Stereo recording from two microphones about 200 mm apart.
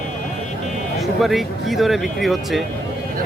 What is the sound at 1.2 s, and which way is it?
Speech, centre (ahead or behind).